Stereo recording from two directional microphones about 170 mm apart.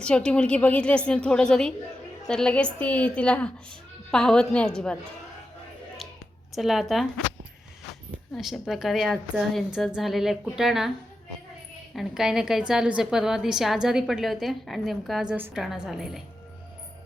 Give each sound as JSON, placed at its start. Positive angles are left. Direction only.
{"t": 0.0, "sound": "a woman's voice", "side_deg": 5}
{"t": 6.5, "sound": "a woman's voice", "side_deg": 0}
{"t": 8.4, "sound": "a woman's voice", "side_deg": 0}
{"t": 11.9, "sound": "a woman's voice", "side_deg": 0}